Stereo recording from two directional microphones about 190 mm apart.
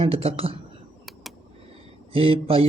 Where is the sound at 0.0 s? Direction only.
30° right (ahead or behind).